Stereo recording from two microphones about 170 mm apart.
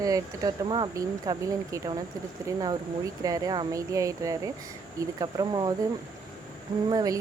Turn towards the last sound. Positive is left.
turn(degrees=-20)  # may be behind; listen again after turning